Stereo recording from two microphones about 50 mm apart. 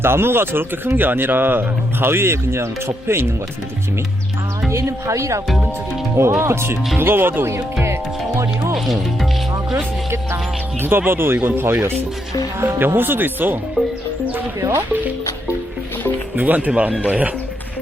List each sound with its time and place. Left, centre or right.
0.0 s speech: right
4.7 s a woman's voice: right
6.4 s speech: right
7.0 s speech: right
10.8 s speech: right
14.6 s speech: right
16.3 s speech: right